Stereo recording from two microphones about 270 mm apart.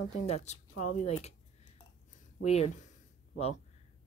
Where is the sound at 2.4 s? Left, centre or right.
Left.